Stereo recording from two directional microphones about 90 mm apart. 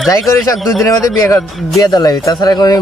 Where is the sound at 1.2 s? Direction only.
35° left (ahead or behind).